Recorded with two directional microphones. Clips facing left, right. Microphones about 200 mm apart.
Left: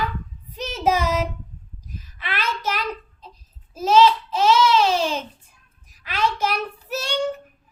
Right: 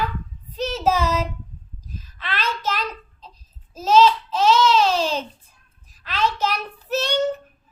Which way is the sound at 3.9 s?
10° left (ahead or behind).